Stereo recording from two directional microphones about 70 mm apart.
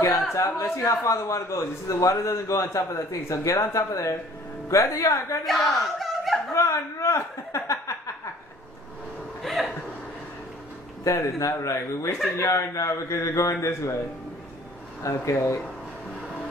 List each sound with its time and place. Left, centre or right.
0.3 s a man's voice: left
5.4 s speech: centre
6.5 s a sound: left
9.5 s a sound: centre
11.1 s a man's voice: left
15.0 s a man's voice: left